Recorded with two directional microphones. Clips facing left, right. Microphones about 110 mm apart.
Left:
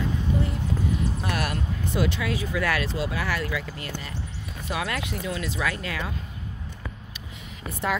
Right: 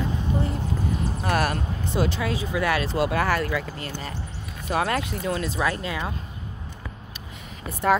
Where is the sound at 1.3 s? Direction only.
40° right (ahead or behind); by 2.8 s 25° right (ahead or behind).